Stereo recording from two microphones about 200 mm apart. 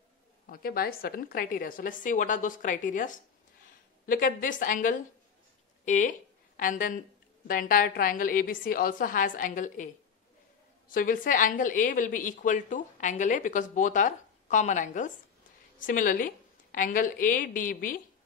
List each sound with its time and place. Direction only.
0.5 s a woman's voice: 50° left (ahead or behind)
10.9 s a woman's voice: 45° left (ahead or behind)